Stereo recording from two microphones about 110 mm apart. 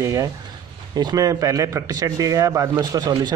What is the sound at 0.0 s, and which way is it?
Speech, 30° right (ahead or behind).